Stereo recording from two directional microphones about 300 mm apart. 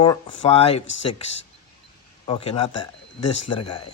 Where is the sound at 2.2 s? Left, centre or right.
Centre.